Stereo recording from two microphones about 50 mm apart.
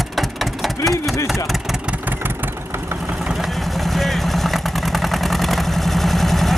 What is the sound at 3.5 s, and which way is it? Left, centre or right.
Vehicle, centre.